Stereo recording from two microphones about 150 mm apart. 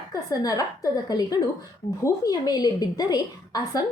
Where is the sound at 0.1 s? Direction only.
25° left (ahead or behind).